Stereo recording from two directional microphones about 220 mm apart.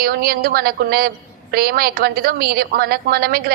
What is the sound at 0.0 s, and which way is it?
A woman's voice, 45° right (ahead or behind).